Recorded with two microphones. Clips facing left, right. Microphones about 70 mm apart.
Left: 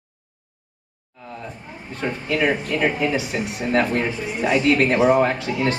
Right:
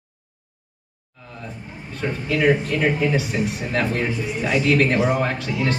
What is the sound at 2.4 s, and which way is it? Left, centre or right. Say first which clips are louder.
Speech: right 2 dB; centre.